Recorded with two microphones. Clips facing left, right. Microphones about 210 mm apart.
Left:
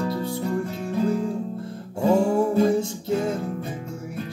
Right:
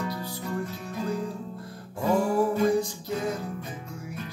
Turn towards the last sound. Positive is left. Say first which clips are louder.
# left 5 dB
turn(degrees=30)  # may be behind; listen again after turning